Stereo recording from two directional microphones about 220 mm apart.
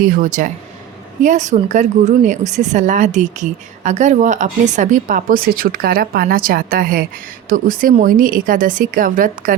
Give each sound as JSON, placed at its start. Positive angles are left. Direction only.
{"t": 0.0, "sound": "a woman's voice", "side_deg": -35}